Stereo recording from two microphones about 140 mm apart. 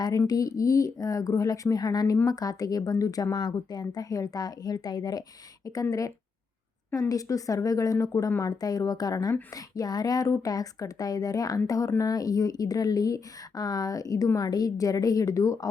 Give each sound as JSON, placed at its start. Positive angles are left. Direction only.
{"t": 0.0, "sound": "a woman's voice", "side_deg": 25}